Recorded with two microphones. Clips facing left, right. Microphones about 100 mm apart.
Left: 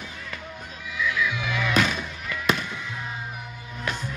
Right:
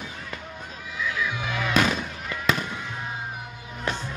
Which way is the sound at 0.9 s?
40° right (ahead or behind).